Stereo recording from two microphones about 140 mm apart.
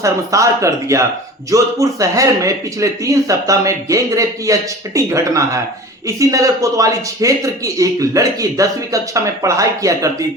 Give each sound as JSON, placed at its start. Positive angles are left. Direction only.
{"t": 0.0, "sound": "a man's voice", "side_deg": -20}